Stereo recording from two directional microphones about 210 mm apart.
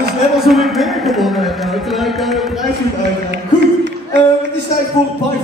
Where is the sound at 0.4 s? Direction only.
Centre (ahead or behind).